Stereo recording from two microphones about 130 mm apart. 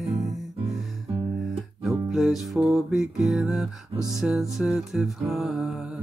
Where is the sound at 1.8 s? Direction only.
Centre (ahead or behind).